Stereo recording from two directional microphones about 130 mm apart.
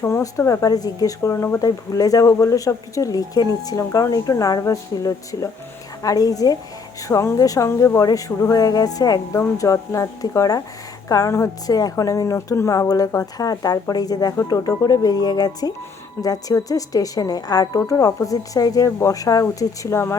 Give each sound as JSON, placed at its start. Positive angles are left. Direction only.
{"t": 0.0, "sound": "speech", "side_deg": 20}